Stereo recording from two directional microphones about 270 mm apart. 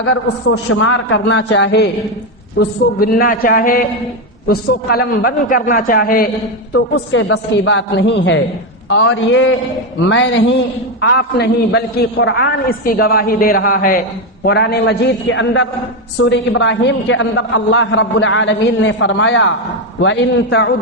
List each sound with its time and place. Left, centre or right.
0.0 s a man's voice: left
6.9 s a man's voice: left